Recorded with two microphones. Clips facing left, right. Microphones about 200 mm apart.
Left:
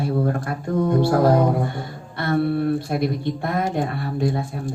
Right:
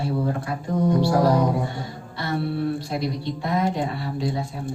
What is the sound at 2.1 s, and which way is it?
Speech, 55° left (ahead or behind).